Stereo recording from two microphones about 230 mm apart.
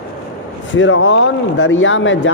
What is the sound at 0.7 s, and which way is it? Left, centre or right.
Speech, left.